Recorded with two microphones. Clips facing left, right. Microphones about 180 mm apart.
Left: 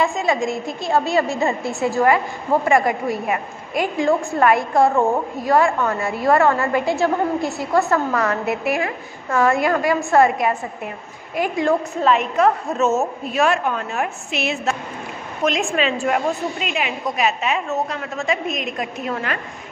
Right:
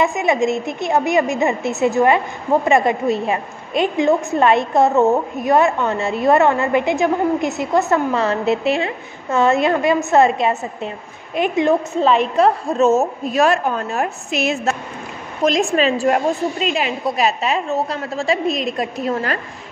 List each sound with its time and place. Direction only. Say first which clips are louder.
0.0 s a woman's voice: right 3 dB; 20° right (ahead or behind); by 19.4 s 35° right (ahead or behind)